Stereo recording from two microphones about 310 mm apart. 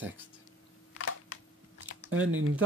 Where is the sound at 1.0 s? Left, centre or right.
Left.